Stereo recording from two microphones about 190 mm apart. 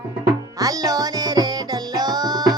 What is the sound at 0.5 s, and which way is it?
Music, 20° right (ahead or behind).